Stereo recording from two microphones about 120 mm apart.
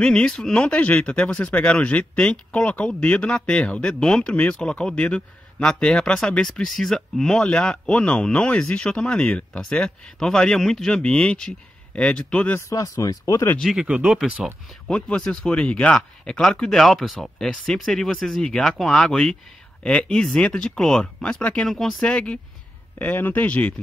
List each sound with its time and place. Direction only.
0.0 s speech: 5° left (ahead or behind)
12.5 s speech: 25° left (ahead or behind)
13.6 s speech: centre (ahead or behind)
14.9 s speech: 10° left (ahead or behind)